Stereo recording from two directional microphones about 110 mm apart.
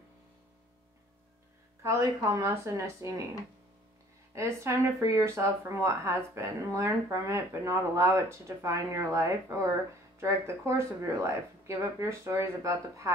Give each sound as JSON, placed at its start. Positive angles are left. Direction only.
{"t": 1.8, "sound": "speech", "side_deg": -25}
{"t": 4.4, "sound": "speech", "side_deg": -25}